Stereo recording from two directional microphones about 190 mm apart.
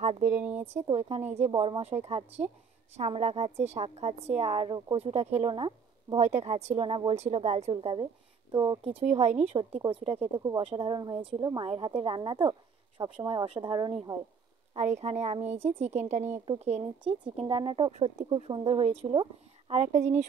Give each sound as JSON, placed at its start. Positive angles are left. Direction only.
{"t": 0.0, "sound": "a woman's voice", "side_deg": -40}
{"t": 0.4, "sound": "speech", "side_deg": -10}
{"t": 0.8, "sound": "a woman's voice", "side_deg": -30}
{"t": 6.1, "sound": "a woman's voice", "side_deg": -35}
{"t": 14.7, "sound": "a woman's voice", "side_deg": -35}